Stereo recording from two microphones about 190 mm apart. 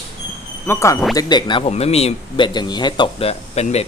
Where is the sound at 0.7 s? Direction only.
15° left (ahead or behind).